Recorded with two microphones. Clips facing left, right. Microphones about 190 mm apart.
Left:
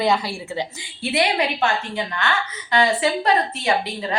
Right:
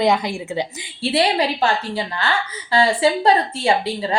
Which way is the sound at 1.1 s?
30° right (ahead or behind).